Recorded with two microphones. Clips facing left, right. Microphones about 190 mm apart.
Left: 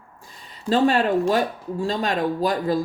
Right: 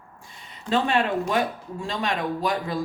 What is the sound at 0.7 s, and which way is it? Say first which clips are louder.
A woman's voice: left 4 dB; 40° left (ahead or behind).